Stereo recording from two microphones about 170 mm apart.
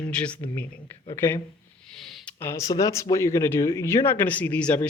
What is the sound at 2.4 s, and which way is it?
Speech, 15° left (ahead or behind).